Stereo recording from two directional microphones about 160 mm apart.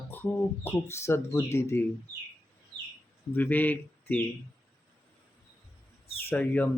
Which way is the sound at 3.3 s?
10° left (ahead or behind).